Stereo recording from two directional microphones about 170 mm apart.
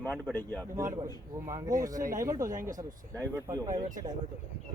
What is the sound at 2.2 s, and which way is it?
Speech, 20° right (ahead or behind).